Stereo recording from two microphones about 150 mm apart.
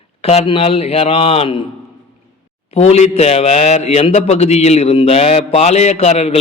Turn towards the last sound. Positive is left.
turn(degrees=45)  # may be behind; listen again after turning